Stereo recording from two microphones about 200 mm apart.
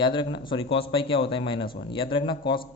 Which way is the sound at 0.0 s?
25° left (ahead or behind).